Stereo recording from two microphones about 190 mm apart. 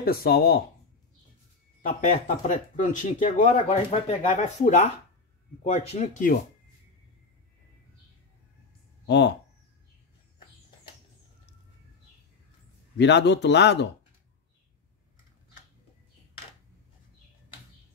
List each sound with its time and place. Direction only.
0.0 s speech: 50° left (ahead or behind)
1.8 s speech: 40° left (ahead or behind)
9.0 s speech: 65° left (ahead or behind)
12.9 s speech: 65° left (ahead or behind)